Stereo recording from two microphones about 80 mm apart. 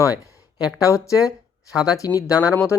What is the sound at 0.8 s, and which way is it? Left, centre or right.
Speech, left.